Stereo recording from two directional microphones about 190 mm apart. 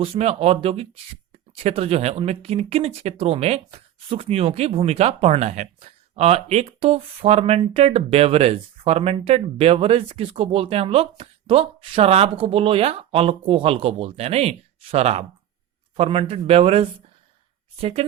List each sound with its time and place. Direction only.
0.0 s speech: 30° right (ahead or behind)